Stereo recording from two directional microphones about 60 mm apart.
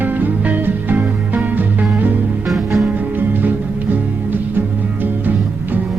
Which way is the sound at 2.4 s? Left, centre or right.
Centre.